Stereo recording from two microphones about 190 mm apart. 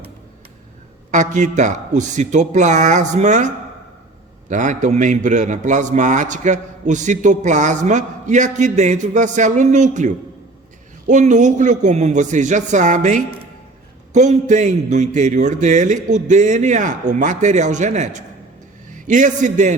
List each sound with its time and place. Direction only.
1.1 s a man's voice: 40° right (ahead or behind)